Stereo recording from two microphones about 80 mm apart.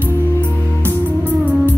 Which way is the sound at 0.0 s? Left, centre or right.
Right.